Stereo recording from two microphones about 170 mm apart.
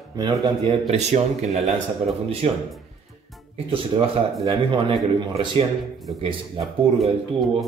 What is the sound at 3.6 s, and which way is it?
A man's voice, 30° right (ahead or behind).